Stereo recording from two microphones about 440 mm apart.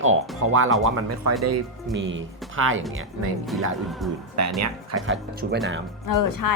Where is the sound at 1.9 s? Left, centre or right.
Right.